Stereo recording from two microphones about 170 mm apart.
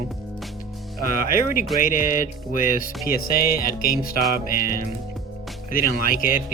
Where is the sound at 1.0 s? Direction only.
50° left (ahead or behind).